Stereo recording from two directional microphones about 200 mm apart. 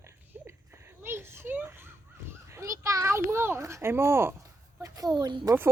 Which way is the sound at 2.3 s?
15° right (ahead or behind).